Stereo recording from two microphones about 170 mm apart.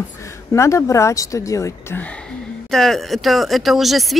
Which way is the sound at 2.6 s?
Centre (ahead or behind).